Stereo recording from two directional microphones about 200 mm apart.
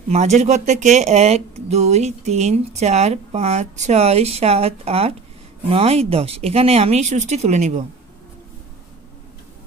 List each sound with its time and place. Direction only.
0.1 s speech: 35° right (ahead or behind)